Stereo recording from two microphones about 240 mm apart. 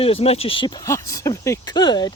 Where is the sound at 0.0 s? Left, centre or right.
Left.